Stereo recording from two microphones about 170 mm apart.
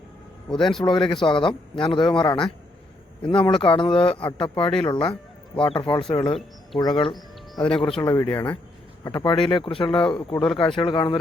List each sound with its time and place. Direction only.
0.6 s speech: centre (ahead or behind)
0.9 s speech: 30° left (ahead or behind)